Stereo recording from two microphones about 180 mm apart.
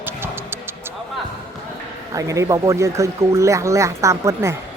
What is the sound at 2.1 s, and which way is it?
Speech, 15° right (ahead or behind).